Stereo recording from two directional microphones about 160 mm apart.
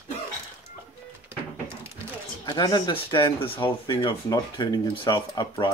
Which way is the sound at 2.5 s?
25° left (ahead or behind).